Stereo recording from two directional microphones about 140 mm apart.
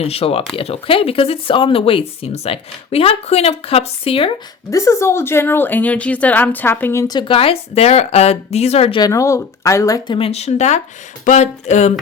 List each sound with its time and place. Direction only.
0.0 s speech: 45° left (ahead or behind)
4.7 s speech: 20° left (ahead or behind)
7.2 s speech: 40° left (ahead or behind)
9.0 s speech: 25° left (ahead or behind)
10.2 s speech: 45° left (ahead or behind)
11.3 s a sound: 55° left (ahead or behind)